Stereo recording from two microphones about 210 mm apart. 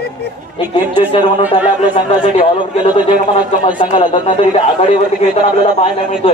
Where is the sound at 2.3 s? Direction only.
25° left (ahead or behind).